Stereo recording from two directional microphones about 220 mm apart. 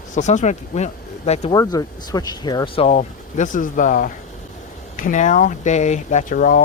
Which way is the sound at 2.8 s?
35° left (ahead or behind).